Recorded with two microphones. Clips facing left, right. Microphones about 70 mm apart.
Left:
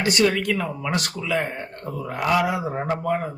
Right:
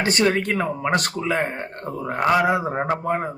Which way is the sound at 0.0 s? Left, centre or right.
Right.